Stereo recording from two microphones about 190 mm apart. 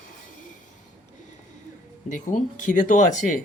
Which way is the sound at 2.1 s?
45° left (ahead or behind).